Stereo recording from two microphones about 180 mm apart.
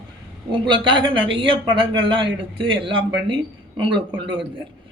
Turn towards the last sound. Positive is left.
turn(degrees=-25)  # may be behind; listen again after turning